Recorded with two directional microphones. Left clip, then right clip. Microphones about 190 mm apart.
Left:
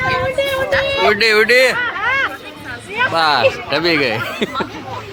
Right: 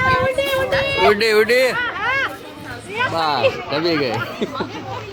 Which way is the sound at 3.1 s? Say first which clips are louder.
Left 5 dB; 15° left (ahead or behind).